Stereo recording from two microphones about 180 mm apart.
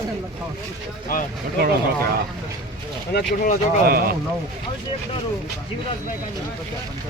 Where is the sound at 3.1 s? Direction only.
60° left (ahead or behind).